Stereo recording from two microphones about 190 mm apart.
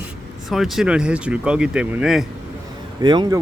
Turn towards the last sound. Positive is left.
turn(degrees=-25)  # may be behind; listen again after turning